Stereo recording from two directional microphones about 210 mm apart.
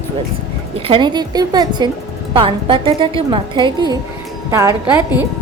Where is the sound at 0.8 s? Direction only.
25° right (ahead or behind).